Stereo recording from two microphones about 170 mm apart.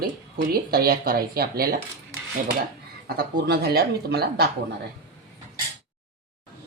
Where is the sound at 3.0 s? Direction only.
70° right (ahead or behind).